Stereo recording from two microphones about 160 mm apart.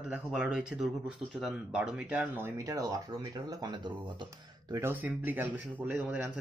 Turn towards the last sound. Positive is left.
turn(degrees=-10)  # may be behind; listen again after turning